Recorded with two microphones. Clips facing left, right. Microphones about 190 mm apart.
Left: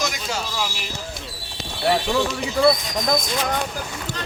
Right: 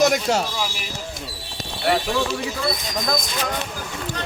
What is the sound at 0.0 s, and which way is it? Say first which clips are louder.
Speech: right 9 dB; 65° right (ahead or behind).